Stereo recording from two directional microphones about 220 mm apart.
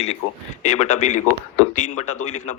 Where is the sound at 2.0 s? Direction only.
80° left.